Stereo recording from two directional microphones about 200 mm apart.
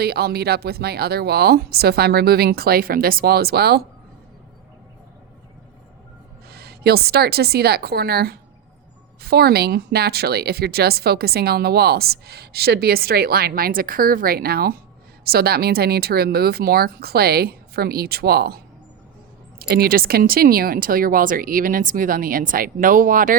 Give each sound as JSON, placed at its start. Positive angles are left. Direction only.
{"t": 0.0, "sound": "speech", "side_deg": -50}
{"t": 6.5, "sound": "a woman's voice", "side_deg": -50}